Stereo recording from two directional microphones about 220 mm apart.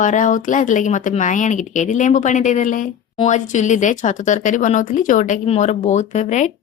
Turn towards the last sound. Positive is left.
turn(degrees=35)  # may be behind; listen again after turning